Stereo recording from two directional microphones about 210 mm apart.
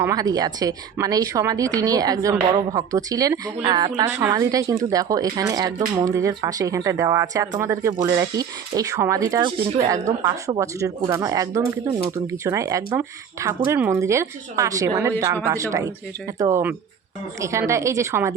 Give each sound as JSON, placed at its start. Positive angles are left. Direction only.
{"t": 0.0, "sound": "speech", "side_deg": -15}